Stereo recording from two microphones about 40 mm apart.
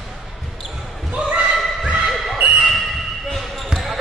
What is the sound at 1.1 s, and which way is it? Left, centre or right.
Basketball bounce, right.